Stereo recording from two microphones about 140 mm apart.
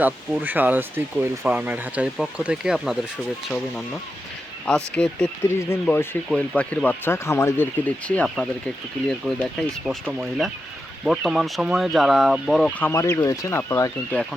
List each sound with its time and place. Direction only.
0.0 s speech: 10° right (ahead or behind)
12.8 s speech: 20° left (ahead or behind)